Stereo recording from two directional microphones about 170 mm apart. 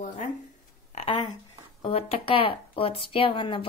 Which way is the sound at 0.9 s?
30° left (ahead or behind).